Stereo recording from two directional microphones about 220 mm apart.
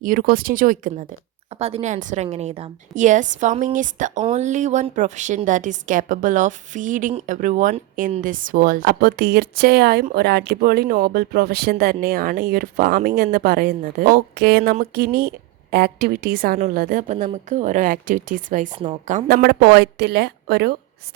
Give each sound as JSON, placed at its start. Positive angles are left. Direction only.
{"t": 0.0, "sound": "a woman's voice", "side_deg": -40}